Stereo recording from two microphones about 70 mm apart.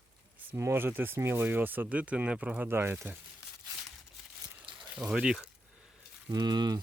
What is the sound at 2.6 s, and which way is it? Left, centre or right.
Speech, right.